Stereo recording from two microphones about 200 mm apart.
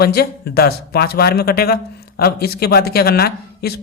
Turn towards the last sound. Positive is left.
turn(degrees=50)  # may be behind; listen again after turning